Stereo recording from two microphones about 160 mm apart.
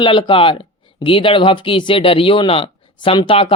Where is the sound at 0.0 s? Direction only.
30° left (ahead or behind).